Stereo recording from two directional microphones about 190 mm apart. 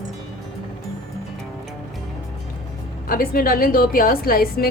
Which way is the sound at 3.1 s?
50° left (ahead or behind).